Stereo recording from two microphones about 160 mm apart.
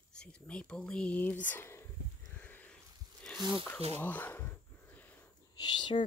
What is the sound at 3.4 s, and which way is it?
Speech, 25° right (ahead or behind).